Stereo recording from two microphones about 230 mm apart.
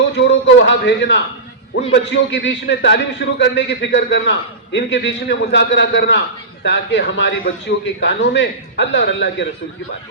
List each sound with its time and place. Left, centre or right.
0.1 s a man's voice: left